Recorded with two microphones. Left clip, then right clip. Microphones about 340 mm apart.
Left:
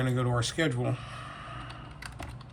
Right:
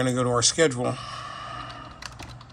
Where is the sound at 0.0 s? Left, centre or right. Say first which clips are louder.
Right 8 dB; centre.